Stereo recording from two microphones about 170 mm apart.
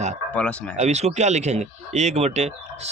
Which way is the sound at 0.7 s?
40° right (ahead or behind).